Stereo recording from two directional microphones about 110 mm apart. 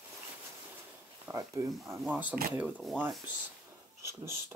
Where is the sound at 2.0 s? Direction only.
15° right (ahead or behind).